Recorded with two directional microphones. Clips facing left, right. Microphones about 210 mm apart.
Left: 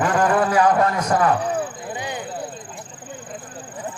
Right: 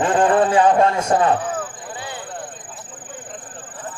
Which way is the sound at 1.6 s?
15° left (ahead or behind).